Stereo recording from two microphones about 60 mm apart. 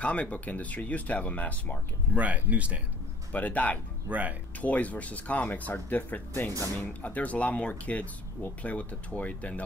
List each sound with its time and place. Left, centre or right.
0.0 s speech: left
2.1 s speech: right
3.3 s speech: left
4.1 s speech: right
4.6 s speech: left